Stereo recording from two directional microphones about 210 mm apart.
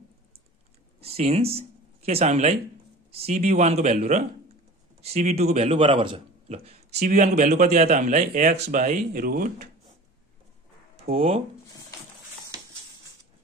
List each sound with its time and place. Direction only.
1.0 s a man's voice: 30° right (ahead or behind)
11.1 s speech: 30° right (ahead or behind)